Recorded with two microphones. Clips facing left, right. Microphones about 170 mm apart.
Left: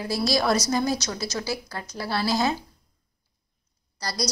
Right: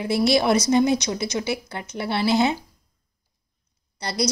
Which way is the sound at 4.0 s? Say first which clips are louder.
Right 4 dB; 25° right (ahead or behind).